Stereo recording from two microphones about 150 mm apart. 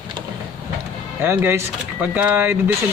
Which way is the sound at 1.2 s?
15° right (ahead or behind).